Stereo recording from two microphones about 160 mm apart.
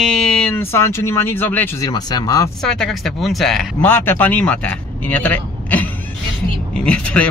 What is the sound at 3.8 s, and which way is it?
Speech, 10° left (ahead or behind).